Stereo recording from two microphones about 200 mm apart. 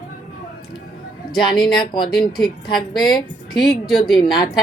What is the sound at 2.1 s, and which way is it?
Speech, centre (ahead or behind).